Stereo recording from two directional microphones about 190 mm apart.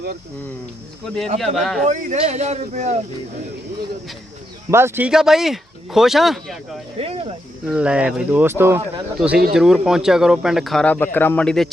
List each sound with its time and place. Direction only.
1.0 s speech: centre (ahead or behind)
1.8 s a man's voice: 40° right (ahead or behind)
4.7 s speech: 10° right (ahead or behind)
7.0 s a man's voice: 30° right (ahead or behind)
7.7 s speech: 5° right (ahead or behind)